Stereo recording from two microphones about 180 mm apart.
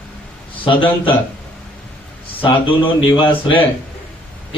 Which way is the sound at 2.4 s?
30° left (ahead or behind).